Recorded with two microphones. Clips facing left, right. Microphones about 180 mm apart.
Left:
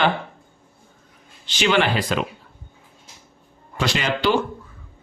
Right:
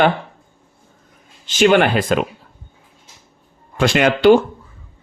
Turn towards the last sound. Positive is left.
turn(degrees=-55)  # may be behind; listen again after turning